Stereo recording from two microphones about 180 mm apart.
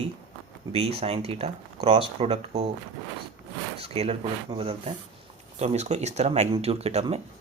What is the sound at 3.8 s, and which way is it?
Speech, 35° right (ahead or behind).